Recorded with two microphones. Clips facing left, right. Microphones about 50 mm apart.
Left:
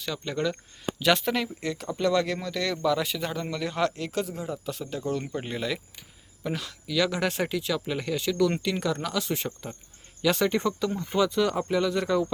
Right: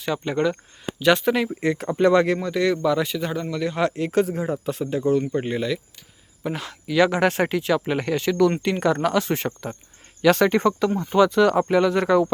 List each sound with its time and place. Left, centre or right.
0.0 s speech: right
0.9 s speech: centre
1.6 s speech: right
2.4 s speech: centre
4.0 s speech: right
5.3 s speech: centre
6.5 s speech: right
9.5 s speech: right
10.2 s speech: right